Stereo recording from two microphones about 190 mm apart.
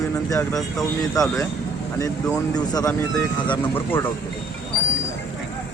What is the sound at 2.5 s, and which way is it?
A man's voice, 20° left (ahead or behind).